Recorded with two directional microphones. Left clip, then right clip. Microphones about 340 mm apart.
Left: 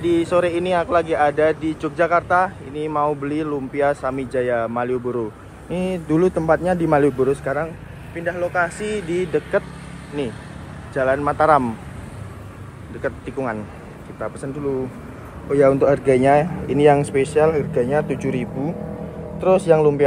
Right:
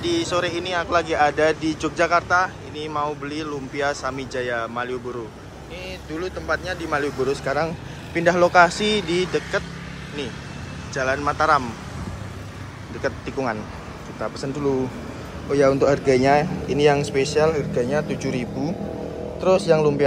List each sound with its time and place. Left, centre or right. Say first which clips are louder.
0.0 s speech: left 4 dB; centre
8.7 s speech: right 3 dB; right
9.1 s speech: left 2 dB; centre
11.0 s speech: left 4 dB; centre
13.0 s speech: even; centre
15.5 s speech: left 2 dB; centre